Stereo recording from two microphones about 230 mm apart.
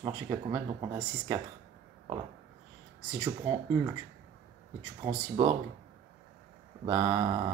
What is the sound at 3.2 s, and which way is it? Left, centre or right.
Speech, centre.